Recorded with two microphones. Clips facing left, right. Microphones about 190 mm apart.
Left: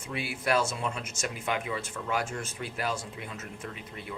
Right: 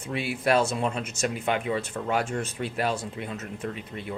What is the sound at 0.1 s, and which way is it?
Speech, 25° right (ahead or behind).